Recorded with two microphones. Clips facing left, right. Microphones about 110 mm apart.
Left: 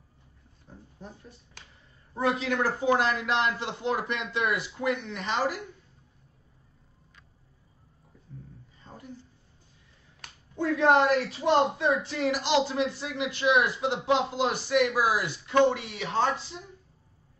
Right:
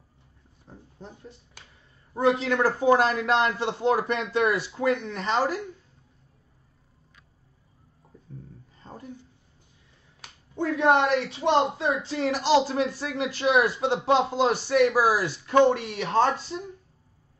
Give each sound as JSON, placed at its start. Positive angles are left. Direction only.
{"t": 0.7, "sound": "a sound", "side_deg": -25}
{"t": 2.1, "sound": "speech", "side_deg": -30}
{"t": 10.5, "sound": "speech", "side_deg": -25}